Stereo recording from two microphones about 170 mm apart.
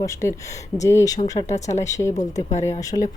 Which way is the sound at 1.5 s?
40° left (ahead or behind).